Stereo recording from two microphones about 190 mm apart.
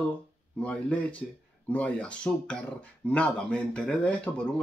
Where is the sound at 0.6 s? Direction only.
5° left (ahead or behind).